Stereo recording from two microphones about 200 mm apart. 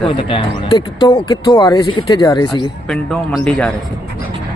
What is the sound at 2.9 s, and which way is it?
Speech, 5° left (ahead or behind).